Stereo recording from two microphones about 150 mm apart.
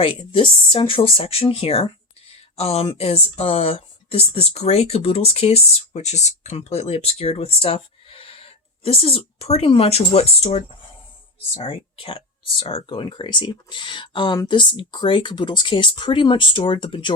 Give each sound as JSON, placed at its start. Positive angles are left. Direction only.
{"t": 0.0, "sound": "speech", "side_deg": 35}